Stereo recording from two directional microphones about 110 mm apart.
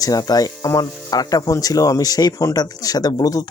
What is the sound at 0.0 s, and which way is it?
Speech, 35° left (ahead or behind).